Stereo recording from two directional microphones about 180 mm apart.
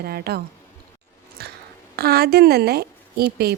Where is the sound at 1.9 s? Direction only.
60° right (ahead or behind).